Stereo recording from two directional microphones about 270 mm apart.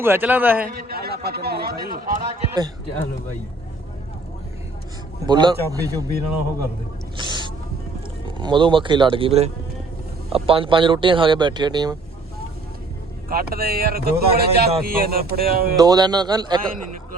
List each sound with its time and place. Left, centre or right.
0.0 s speech: centre
0.8 s speech: right
5.2 s speech: centre
6.1 s speech: right
8.4 s speech: centre
13.2 s speech: right
15.8 s speech: centre